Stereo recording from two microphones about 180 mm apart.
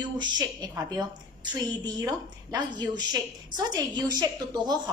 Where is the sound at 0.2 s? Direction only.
25° right (ahead or behind).